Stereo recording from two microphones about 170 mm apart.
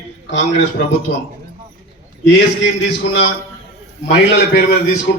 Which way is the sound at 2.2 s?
90° left.